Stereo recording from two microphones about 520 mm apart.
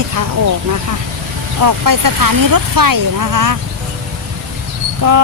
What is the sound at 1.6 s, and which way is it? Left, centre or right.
Speech, right.